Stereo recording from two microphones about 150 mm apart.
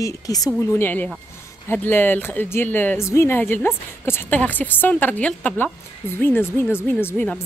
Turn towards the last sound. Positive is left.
turn(degrees=10)  # may be behind; listen again after turning